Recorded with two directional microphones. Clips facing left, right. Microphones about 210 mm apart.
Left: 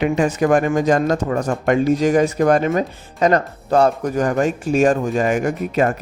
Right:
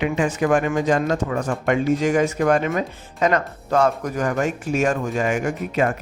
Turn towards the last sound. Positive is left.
turn(degrees=40)  # may be behind; listen again after turning